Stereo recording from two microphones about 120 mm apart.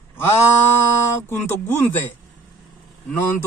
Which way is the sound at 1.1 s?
20° left (ahead or behind).